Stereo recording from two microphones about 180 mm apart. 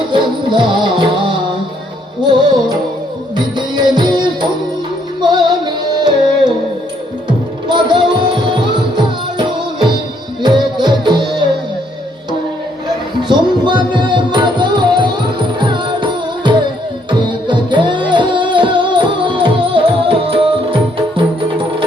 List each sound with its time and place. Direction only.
0.1 s music: 25° right (ahead or behind)
13.2 s music: 25° right (ahead or behind)